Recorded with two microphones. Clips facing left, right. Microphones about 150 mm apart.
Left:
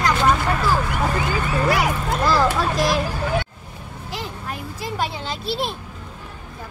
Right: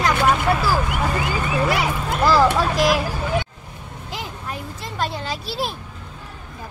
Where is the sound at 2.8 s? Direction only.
10° right (ahead or behind).